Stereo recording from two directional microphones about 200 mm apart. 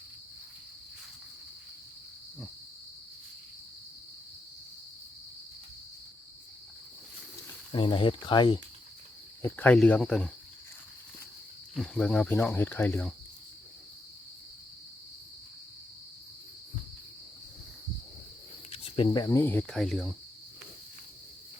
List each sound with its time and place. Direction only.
7.7 s speech: 25° left (ahead or behind)
9.4 s speech: 10° left (ahead or behind)
11.7 s speech: centre (ahead or behind)
18.7 s speech: 25° left (ahead or behind); by 20.1 s centre (ahead or behind)